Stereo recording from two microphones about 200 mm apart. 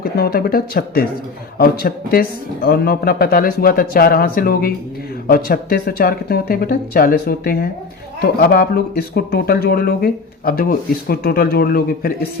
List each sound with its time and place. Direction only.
0.0 s speech: 50° left (ahead or behind)